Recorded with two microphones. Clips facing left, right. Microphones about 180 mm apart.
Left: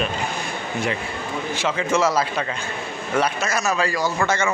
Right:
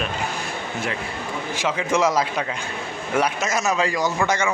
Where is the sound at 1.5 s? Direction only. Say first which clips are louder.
Even; 10° right (ahead or behind).